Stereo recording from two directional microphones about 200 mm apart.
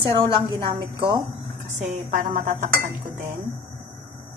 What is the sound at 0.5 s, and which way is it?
Speech, 25° right (ahead or behind).